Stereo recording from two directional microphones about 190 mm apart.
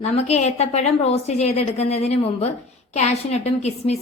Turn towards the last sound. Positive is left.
turn(degrees=35)  # may be behind; listen again after turning